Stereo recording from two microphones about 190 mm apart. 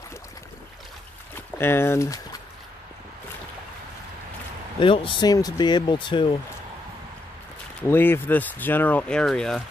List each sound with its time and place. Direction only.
1.6 s speech: 10° left (ahead or behind)
4.7 s speech: 25° left (ahead or behind)
7.8 s speech: 10° left (ahead or behind)